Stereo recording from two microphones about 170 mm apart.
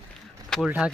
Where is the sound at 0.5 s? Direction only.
5° right (ahead or behind).